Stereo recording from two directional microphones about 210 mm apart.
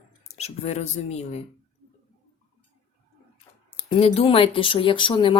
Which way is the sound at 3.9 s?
25° left (ahead or behind).